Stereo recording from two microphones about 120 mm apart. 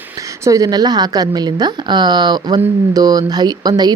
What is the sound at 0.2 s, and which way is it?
Speech, 25° right (ahead or behind).